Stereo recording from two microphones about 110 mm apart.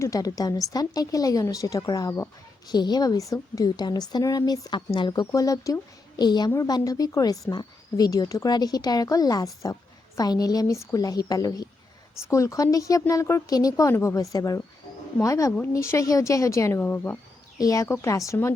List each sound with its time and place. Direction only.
0.0 s a woman's voice: 30° left (ahead or behind)
17.6 s speech: 30° left (ahead or behind)